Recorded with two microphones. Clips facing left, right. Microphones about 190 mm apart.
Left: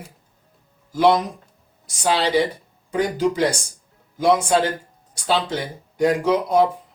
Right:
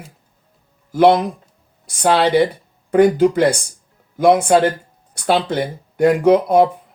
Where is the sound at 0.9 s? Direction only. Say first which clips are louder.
Right 5 dB; 60° right (ahead or behind).